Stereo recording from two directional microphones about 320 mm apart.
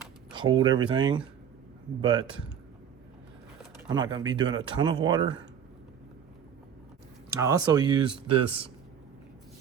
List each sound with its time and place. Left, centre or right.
0.3 s speech: centre
3.8 s speech: centre
7.3 s speech: centre